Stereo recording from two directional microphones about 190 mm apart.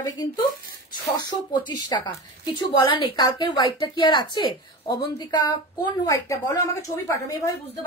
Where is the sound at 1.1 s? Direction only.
25° left (ahead or behind).